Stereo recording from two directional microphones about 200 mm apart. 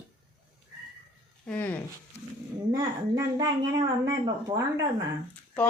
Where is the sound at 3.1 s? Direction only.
20° right (ahead or behind).